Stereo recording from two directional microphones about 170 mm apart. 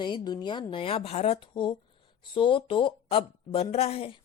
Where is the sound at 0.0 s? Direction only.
25° left (ahead or behind).